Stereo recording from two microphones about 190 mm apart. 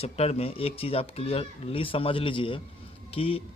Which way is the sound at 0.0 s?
35° left (ahead or behind).